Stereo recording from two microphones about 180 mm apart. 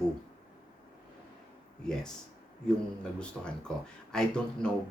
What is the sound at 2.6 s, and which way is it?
Speech, 5° left (ahead or behind).